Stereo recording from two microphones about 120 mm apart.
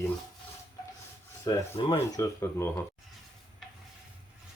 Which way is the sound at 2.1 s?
20° left (ahead or behind).